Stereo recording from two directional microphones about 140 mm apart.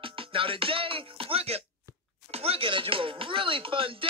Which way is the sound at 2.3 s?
45° right (ahead or behind).